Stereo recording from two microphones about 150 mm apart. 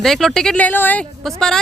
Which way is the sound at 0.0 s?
Centre (ahead or behind).